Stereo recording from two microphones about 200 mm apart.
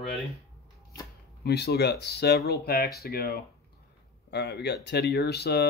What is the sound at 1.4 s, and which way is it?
Speech, 55° left (ahead or behind).